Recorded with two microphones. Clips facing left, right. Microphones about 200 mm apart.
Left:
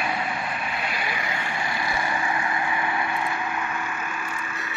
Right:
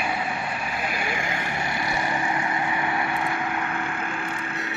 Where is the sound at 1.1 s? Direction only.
50° right (ahead or behind).